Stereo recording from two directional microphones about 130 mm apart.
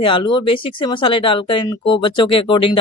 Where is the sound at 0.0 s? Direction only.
40° left (ahead or behind).